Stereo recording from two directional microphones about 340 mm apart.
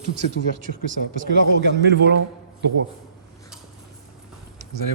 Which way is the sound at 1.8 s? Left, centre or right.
Right.